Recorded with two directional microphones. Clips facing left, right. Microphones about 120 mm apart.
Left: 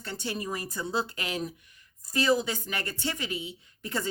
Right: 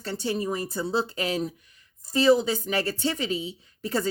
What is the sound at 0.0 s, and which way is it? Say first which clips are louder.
Speech: right 6 dB; 30° right (ahead or behind).